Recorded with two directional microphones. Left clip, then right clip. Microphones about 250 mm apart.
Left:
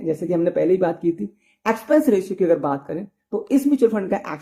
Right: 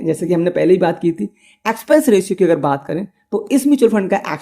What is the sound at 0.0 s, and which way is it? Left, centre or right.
Speech, right.